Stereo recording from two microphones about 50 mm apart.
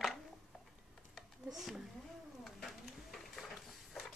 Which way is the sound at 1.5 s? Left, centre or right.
Centre.